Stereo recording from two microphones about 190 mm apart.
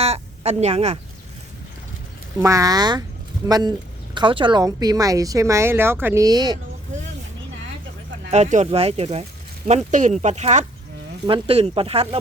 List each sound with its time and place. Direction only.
0.0 s a woman's voice: 30° right (ahead or behind)
2.4 s a woman's voice: 15° right (ahead or behind)
8.3 s a woman's voice: 40° right (ahead or behind)